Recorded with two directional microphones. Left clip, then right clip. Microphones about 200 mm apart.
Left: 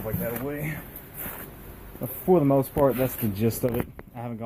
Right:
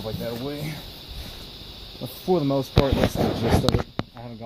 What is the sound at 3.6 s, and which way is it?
Speech, 20° left (ahead or behind).